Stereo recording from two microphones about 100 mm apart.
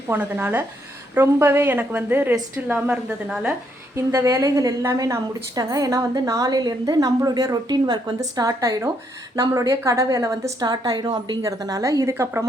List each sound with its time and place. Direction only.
0.1 s a woman's voice: 20° right (ahead or behind)
3.2 s speech: 5° right (ahead or behind)
3.9 s a woman's voice: 30° right (ahead or behind)
10.7 s a woman's voice: 45° right (ahead or behind)
11.4 s a woman's voice: 35° right (ahead or behind)